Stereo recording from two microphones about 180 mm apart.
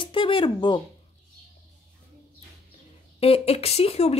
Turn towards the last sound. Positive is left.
turn(degrees=35)  # may be behind; listen again after turning